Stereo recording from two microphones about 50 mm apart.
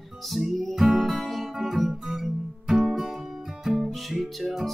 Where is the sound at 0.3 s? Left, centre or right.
Centre.